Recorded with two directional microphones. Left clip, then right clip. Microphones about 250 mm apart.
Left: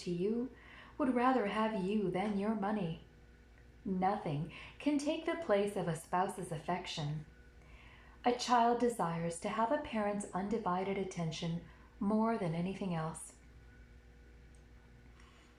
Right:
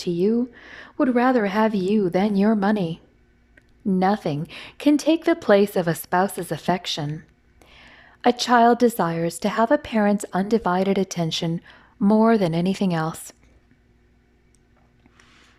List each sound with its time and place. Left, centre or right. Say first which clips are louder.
0.2 s a woman's voice: right 16 dB; right
4.0 s a woman's voice: right 12 dB; right
8.2 s a woman's voice: right 14 dB; right